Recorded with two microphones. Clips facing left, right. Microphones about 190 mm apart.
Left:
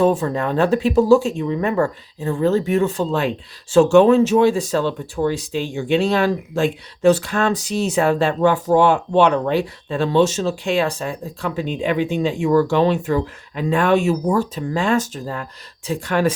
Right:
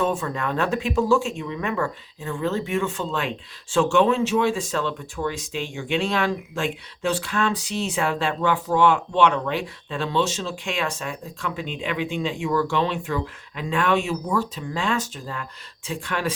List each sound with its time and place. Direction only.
0.0 s speech: 35° left (ahead or behind)